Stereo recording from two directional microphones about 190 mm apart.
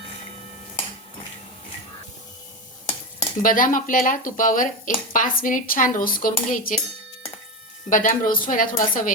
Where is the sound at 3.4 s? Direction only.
45° left (ahead or behind).